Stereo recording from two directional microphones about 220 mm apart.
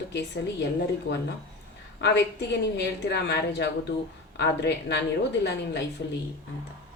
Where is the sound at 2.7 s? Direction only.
50° left (ahead or behind).